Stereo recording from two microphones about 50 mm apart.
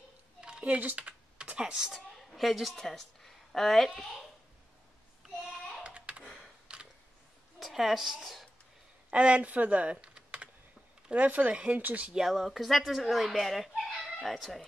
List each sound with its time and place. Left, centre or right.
0.4 s a sound: centre
0.7 s speech: right
0.9 s typing: right
2.1 s a woman's voice: centre
5.9 s computer keyboard: right
6.7 s a sound: centre
7.5 s a woman's voice: centre
9.1 s speech: right
11.1 s speech: right
12.1 s speech: centre
12.4 s speech: centre